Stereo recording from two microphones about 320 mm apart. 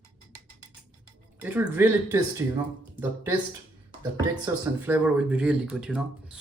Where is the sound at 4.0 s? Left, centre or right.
Centre.